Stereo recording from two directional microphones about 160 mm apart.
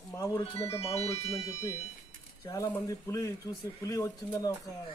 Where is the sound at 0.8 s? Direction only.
40° left (ahead or behind).